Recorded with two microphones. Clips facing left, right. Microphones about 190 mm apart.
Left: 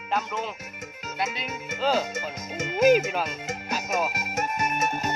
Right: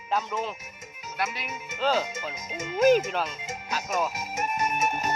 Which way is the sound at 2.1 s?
75° left (ahead or behind).